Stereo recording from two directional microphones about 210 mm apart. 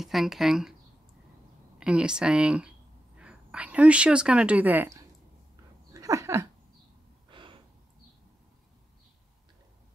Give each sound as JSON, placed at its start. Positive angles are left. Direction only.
{"t": 0.0, "sound": "speech", "side_deg": 0}
{"t": 1.8, "sound": "speech", "side_deg": -5}
{"t": 5.9, "sound": "a sound", "side_deg": -15}
{"t": 7.2, "sound": "gasp", "side_deg": -25}